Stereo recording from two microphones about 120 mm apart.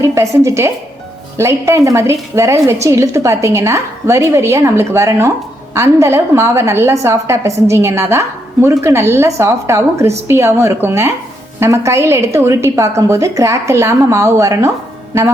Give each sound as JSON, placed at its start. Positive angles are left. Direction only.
{"t": 0.0, "sound": "a woman's voice", "side_deg": -25}